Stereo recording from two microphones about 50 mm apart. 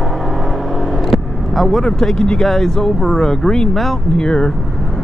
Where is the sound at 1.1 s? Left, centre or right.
Centre.